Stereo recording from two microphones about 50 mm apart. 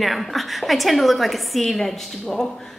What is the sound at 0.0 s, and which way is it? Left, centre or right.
A woman's voice, centre.